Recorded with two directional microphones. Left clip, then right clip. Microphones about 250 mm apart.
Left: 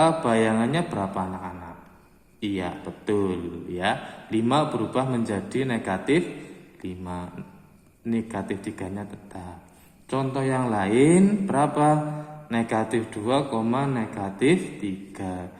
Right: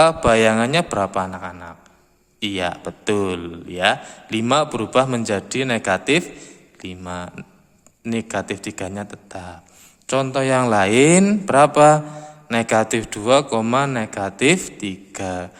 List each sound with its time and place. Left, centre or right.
0.0 s a man's voice: right